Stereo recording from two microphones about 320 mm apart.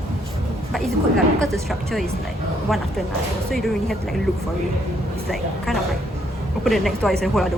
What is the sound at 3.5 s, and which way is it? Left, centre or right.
Speech, centre.